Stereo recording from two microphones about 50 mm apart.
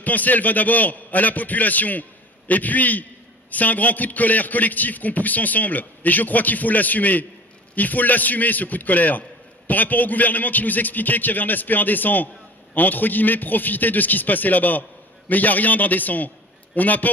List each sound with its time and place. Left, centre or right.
0.0 s a man's voice: left